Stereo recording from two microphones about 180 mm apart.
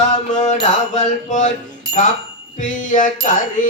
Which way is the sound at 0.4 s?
40° left (ahead or behind).